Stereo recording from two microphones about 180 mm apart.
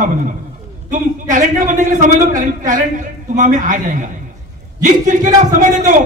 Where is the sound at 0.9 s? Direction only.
45° right (ahead or behind).